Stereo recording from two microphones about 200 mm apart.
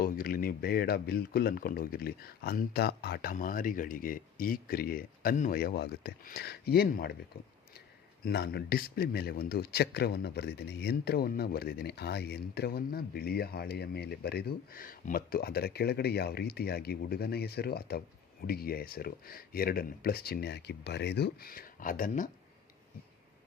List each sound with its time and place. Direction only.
0.0 s speech: 45° left (ahead or behind)